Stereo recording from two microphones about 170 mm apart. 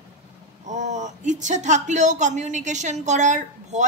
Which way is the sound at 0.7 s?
45° right (ahead or behind).